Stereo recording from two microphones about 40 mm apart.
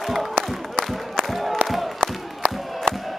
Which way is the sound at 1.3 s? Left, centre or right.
Centre.